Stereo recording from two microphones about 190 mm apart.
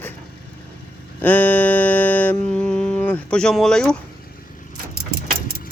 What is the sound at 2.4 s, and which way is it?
Speech, 5° left (ahead or behind).